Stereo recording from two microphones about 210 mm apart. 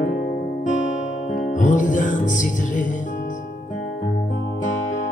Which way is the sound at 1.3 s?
35° left (ahead or behind).